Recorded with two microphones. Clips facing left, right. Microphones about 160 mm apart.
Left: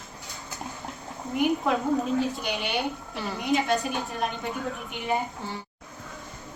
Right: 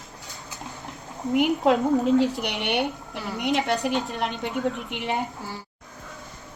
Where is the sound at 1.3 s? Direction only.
85° right; by 3.2 s 65° right (ahead or behind).